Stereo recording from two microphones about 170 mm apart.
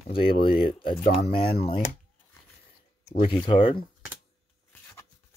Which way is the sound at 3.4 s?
30° left (ahead or behind).